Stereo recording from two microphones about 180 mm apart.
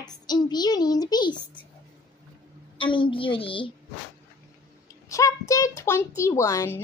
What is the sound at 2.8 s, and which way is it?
Speech, 25° left (ahead or behind).